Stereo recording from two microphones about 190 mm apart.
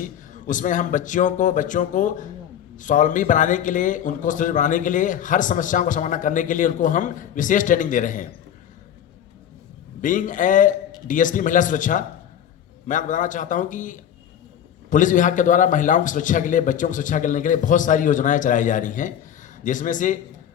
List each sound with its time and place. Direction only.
0.4 s a man's voice: 40° left (ahead or behind)
10.0 s a man's voice: 45° left (ahead or behind)